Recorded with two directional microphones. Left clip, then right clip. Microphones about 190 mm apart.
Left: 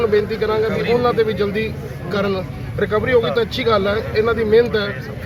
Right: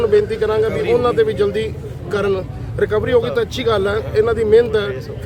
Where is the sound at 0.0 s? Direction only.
30° right (ahead or behind).